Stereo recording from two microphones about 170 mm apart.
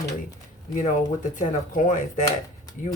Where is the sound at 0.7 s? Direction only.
50° left (ahead or behind).